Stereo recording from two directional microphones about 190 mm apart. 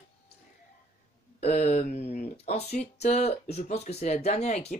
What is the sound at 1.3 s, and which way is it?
Speech, 35° left (ahead or behind).